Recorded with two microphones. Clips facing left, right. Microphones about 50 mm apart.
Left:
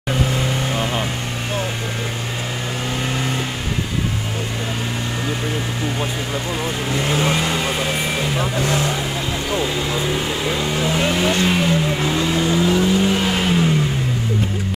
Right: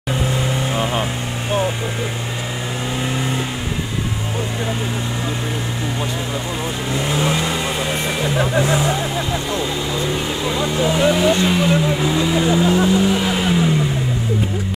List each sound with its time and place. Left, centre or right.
6.9 s speech: centre
8.4 s speech: right
9.5 s speech: centre
12.4 s speech: centre
12.6 s vehicle: right
13.0 s vehicle: centre